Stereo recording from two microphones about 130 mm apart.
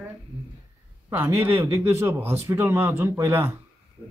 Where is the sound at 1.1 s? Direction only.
15° right (ahead or behind).